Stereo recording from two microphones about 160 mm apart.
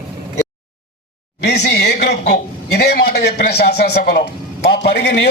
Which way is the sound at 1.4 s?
90° left.